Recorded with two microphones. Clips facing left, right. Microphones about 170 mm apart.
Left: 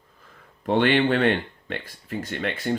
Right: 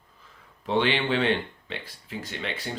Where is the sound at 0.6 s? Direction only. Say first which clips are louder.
Left 5 dB; 50° left (ahead or behind).